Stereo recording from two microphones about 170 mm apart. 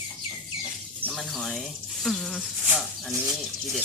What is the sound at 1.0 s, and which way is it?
Speech, centre (ahead or behind).